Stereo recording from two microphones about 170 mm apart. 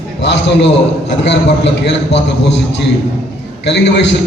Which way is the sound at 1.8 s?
90° left.